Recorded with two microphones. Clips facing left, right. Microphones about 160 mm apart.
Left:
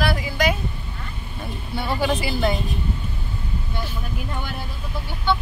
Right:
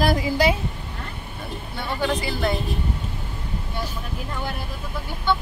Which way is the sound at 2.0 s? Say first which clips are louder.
Left 1 dB; 5° left (ahead or behind).